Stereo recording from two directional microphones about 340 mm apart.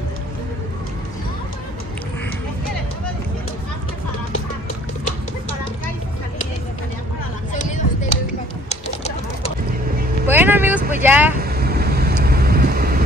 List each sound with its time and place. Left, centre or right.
7.5 s a sound: left
8.6 s bird: centre
10.2 s vehicle: centre
11.4 s vehicle: right